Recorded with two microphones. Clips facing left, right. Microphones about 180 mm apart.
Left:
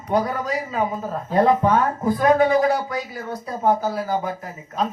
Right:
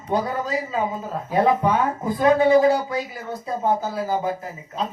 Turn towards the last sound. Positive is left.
turn(degrees=-25)  # may be behind; listen again after turning